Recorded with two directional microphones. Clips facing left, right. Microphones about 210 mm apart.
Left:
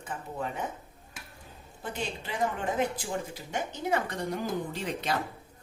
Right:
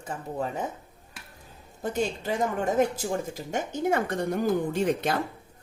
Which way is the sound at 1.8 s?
45° right (ahead or behind).